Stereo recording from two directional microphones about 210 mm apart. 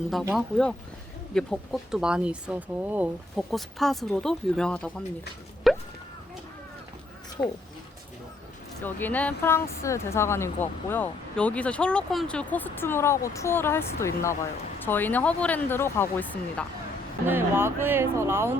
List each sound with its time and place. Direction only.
0.1 s speech: centre (ahead or behind)
5.7 s a sound: centre (ahead or behind)
7.4 s speech: 20° left (ahead or behind)
8.8 s speech: 10° left (ahead or behind)
17.2 s speech: 10° right (ahead or behind)